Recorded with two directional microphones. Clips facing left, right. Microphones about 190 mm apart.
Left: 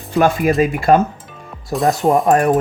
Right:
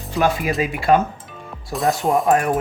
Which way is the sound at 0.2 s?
50° left (ahead or behind).